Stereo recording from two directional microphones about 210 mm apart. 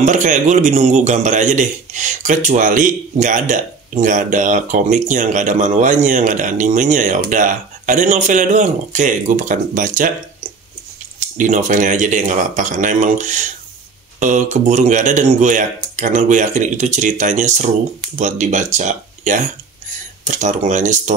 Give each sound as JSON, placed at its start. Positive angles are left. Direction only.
{"t": 0.0, "sound": "a man's voice", "side_deg": -35}
{"t": 11.1, "sound": "a man's voice", "side_deg": -35}